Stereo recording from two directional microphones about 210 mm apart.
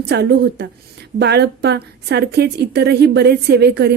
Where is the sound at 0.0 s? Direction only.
50° right (ahead or behind).